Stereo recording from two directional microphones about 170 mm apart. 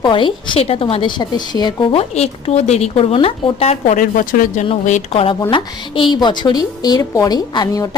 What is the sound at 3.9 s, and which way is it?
Speech, 50° left (ahead or behind).